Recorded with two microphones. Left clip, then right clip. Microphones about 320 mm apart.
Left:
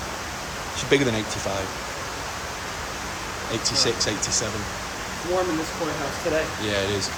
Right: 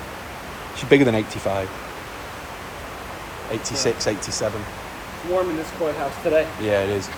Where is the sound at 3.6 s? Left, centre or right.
Centre.